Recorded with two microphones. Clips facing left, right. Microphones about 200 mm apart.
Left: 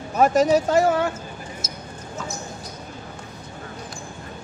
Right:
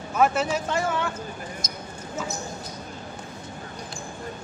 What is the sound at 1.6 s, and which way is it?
Basketball bounce, 5° left (ahead or behind).